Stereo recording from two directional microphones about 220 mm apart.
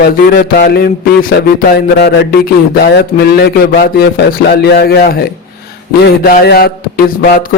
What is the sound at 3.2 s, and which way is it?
A man's voice, 45° left (ahead or behind).